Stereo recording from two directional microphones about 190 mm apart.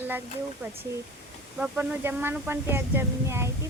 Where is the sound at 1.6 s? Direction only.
10° right (ahead or behind).